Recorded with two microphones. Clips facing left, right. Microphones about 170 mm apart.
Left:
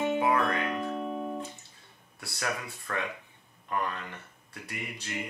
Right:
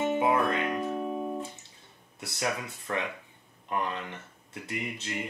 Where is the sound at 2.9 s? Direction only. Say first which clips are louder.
Right 2 dB; 20° right (ahead or behind).